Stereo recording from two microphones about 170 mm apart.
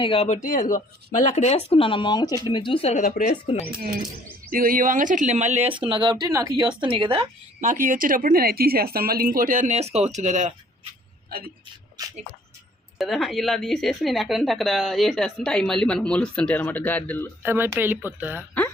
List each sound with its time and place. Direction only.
0.0 s speech: 35° left (ahead or behind)
3.0 s speech: 50° left (ahead or behind)
4.5 s a woman's voice: 55° right (ahead or behind); by 7.3 s 30° right (ahead or behind)
7.6 s speech: 50° right (ahead or behind)
11.3 s a man's voice: 60° right (ahead or behind)
12.0 s a woman's voice: 20° right (ahead or behind)
13.0 s a woman's voice: centre (ahead or behind)
17.4 s speech: 10° right (ahead or behind)